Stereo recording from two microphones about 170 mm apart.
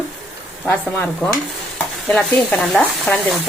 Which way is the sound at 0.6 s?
10° left (ahead or behind).